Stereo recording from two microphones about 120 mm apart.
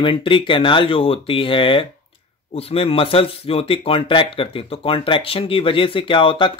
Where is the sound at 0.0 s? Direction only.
45° left (ahead or behind).